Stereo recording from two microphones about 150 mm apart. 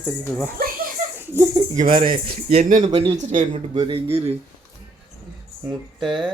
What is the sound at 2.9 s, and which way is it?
Speech, 45° right (ahead or behind).